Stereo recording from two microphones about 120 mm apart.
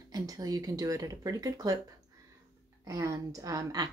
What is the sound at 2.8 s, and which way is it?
A woman's voice, 25° right (ahead or behind).